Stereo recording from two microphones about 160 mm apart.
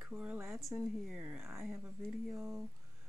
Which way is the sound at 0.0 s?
10° right (ahead or behind).